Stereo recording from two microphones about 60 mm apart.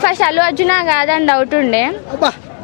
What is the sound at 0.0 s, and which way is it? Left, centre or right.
A woman's voice, centre.